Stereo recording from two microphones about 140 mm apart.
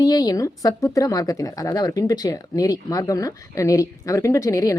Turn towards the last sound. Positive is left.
turn(degrees=20)  # may be behind; listen again after turning